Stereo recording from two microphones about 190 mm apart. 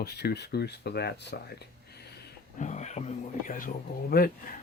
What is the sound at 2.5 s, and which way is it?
Speech, 40° left (ahead or behind).